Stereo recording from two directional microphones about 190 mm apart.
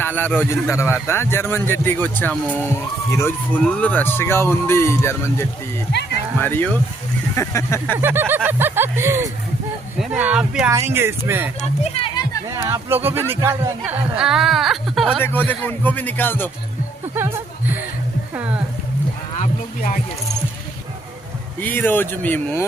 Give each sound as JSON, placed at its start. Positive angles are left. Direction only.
{"t": 0.0, "sound": "speech", "side_deg": 10}
{"t": 7.9, "sound": "speech", "side_deg": -10}
{"t": 11.8, "sound": "speech", "side_deg": 30}
{"t": 12.5, "sound": "speech", "side_deg": -15}
{"t": 17.2, "sound": "a sound", "side_deg": -10}
{"t": 18.3, "sound": "speech", "side_deg": -10}
{"t": 19.4, "sound": "music", "side_deg": 45}
{"t": 21.6, "sound": "speech", "side_deg": 10}